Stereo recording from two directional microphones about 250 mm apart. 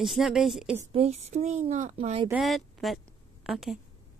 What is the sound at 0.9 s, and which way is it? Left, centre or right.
Speech, right.